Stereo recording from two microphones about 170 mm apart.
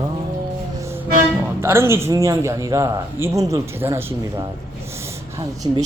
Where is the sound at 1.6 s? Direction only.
15° right (ahead or behind).